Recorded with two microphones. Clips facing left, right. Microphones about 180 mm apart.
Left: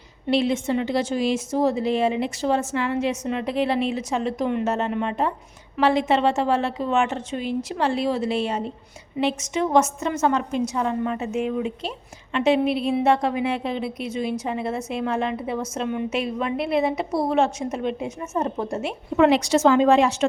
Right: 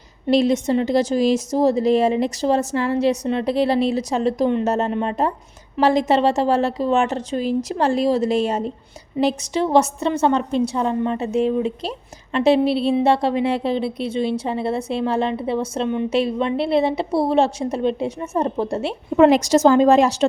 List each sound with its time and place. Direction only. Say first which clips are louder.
0.3 s a woman's voice: right 4 dB; 40° right (ahead or behind)
19.1 s a woman's voice: right 4 dB; 45° right (ahead or behind)